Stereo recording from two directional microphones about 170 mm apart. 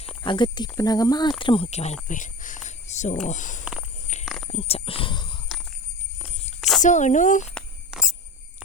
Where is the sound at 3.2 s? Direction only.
45° left (ahead or behind).